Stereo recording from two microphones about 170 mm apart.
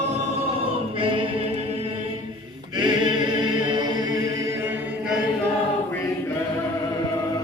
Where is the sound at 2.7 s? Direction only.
25° right (ahead or behind); by 5.2 s 10° right (ahead or behind).